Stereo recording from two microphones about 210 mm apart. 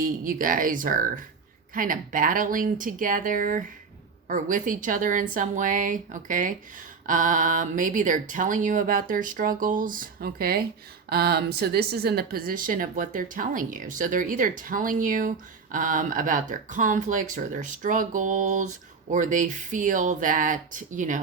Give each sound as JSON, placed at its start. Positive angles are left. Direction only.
{"t": 0.0, "sound": "speech", "side_deg": -40}